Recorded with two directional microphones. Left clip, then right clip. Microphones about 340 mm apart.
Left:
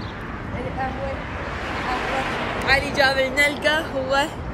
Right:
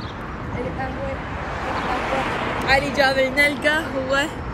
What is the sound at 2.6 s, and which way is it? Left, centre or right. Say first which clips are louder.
Speech: even; centre.